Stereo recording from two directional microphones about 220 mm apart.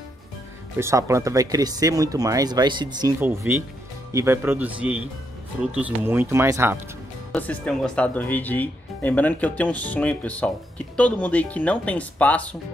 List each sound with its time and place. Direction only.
0.7 s speech: 10° right (ahead or behind)
7.3 s speech: 5° left (ahead or behind)